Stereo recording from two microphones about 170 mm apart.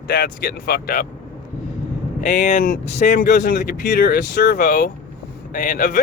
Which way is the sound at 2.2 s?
45° left (ahead or behind).